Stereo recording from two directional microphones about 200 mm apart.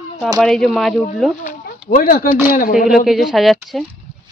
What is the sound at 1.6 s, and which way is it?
Speech, 40° left (ahead or behind).